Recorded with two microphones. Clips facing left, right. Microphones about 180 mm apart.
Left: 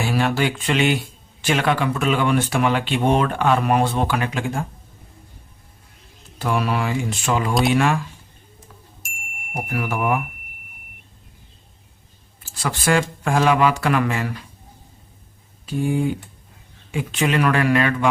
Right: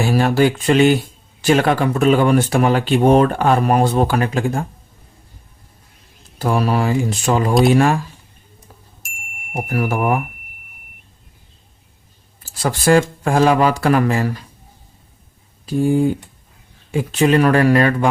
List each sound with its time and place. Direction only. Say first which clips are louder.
0.0 s speech: right 6 dB; 40° right (ahead or behind)
6.4 s speech: right 4 dB; 40° right (ahead or behind)
9.0 s music: even; centre (ahead or behind)
9.6 s speech: right 4 dB; 40° right (ahead or behind)
12.4 s speech: right 5 dB; 35° right (ahead or behind)
15.6 s speech: right 6 dB; 40° right (ahead or behind)